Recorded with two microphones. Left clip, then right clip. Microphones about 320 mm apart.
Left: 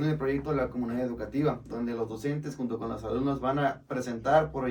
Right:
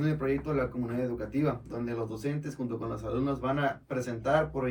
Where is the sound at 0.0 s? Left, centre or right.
Centre.